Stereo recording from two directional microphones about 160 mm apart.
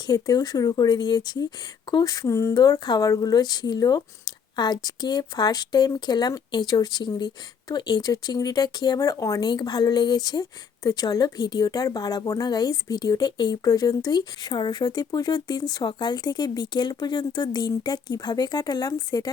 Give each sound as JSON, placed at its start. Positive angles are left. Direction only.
{"t": 0.1, "sound": "a woman's voice", "side_deg": 25}